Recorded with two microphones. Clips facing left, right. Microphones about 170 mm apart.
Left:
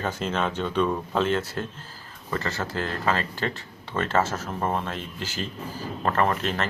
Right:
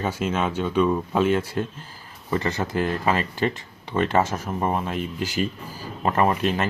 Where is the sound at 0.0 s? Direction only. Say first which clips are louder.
Right 2 dB; 10° right (ahead or behind).